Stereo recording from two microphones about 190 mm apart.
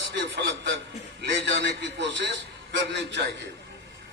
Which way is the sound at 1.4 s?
65° right (ahead or behind).